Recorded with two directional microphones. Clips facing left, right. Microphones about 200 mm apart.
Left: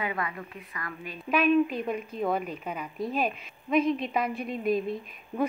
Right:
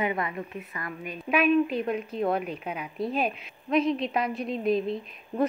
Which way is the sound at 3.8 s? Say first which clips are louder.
Even; 50° left (ahead or behind).